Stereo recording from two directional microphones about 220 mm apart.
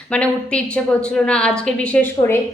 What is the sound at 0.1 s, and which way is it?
A woman's voice, 5° left (ahead or behind).